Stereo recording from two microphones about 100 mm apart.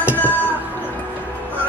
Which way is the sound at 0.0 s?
20° left (ahead or behind).